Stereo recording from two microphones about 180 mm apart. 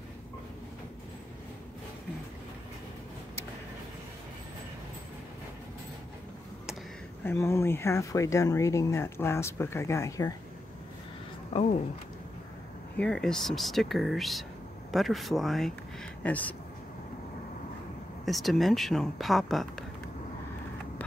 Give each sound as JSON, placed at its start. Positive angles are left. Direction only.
{"t": 7.2, "sound": "speech", "side_deg": 15}
{"t": 11.5, "sound": "speech", "side_deg": 35}
{"t": 12.9, "sound": "speech", "side_deg": 5}
{"t": 18.2, "sound": "speech", "side_deg": 0}